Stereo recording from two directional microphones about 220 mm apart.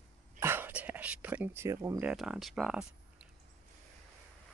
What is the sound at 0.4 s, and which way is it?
Whispering, 10° right (ahead or behind).